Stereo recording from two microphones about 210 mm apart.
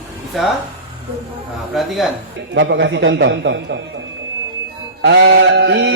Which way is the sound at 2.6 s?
55° right (ahead or behind).